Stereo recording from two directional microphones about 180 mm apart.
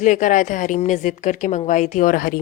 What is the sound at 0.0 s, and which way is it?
A woman's voice, 45° left (ahead or behind).